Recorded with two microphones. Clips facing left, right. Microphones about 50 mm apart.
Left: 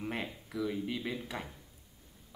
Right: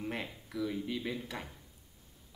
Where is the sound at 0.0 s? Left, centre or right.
Centre.